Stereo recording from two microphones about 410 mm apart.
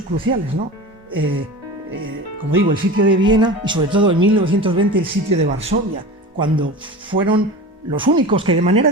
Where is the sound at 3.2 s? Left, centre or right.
Centre.